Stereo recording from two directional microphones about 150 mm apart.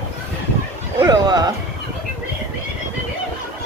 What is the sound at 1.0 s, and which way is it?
Speech, 25° right (ahead or behind).